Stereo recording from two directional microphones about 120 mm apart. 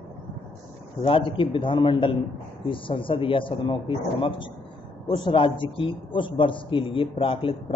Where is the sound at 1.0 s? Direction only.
45° left (ahead or behind).